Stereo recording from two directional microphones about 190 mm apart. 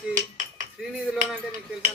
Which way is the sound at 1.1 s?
45° right (ahead or behind).